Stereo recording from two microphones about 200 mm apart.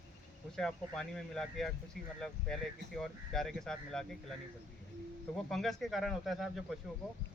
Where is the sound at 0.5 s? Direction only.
5° left (ahead or behind).